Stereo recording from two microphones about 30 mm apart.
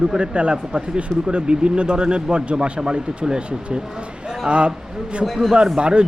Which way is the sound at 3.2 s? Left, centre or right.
Right.